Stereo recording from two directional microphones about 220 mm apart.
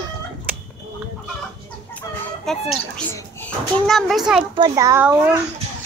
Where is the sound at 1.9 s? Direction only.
Centre (ahead or behind).